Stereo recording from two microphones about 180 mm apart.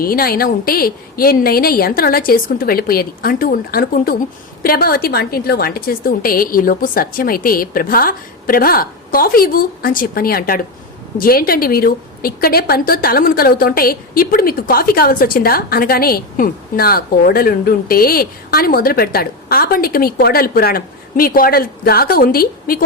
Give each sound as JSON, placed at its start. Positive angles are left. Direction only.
{"t": 0.0, "sound": "a woman's voice", "side_deg": 55}